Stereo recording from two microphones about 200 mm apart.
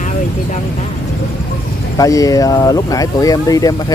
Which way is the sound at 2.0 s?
15° left (ahead or behind).